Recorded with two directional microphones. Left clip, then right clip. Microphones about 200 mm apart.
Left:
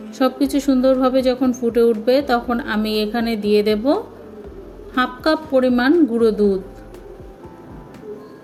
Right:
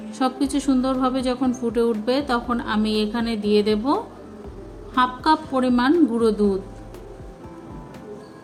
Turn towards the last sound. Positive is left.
turn(degrees=10)  # may be behind; listen again after turning